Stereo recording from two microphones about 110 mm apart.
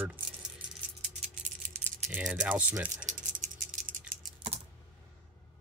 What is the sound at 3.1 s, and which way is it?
Rattle, 90° right.